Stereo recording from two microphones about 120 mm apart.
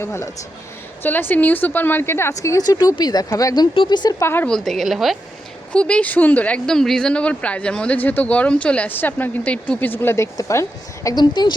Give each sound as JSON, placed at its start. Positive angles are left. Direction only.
{"t": 0.0, "sound": "speech", "side_deg": 25}
{"t": 4.4, "sound": "a woman's voice", "side_deg": 5}
{"t": 5.7, "sound": "speech", "side_deg": 10}
{"t": 11.1, "sound": "speech", "side_deg": 35}